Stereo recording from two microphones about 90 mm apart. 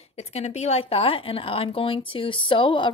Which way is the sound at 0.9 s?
90° left.